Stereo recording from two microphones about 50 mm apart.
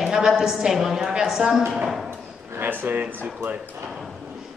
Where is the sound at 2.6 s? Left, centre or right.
Right.